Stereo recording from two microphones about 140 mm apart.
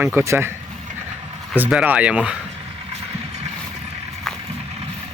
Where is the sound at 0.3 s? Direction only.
15° right (ahead or behind).